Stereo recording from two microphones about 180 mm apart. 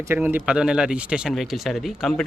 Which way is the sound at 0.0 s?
10° right (ahead or behind).